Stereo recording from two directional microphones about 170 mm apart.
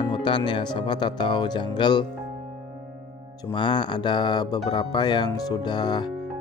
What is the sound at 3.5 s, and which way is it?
Speech, 25° left (ahead or behind).